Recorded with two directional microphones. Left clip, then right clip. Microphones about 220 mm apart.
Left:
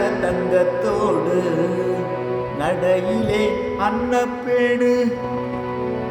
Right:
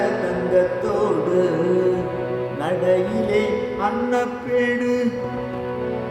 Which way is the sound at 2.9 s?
20° left (ahead or behind).